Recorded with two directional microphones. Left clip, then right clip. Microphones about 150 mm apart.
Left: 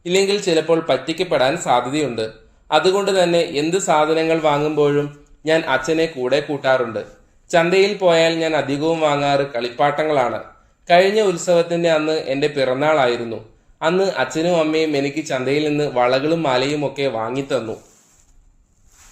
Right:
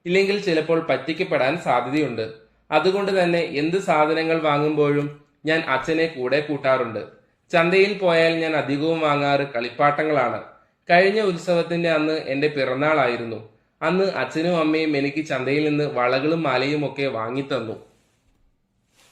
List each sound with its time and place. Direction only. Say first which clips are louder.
0.0 s a man's voice: left 3 dB; 35° left (ahead or behind)